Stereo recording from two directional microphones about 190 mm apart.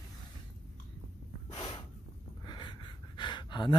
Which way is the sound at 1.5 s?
20° left (ahead or behind).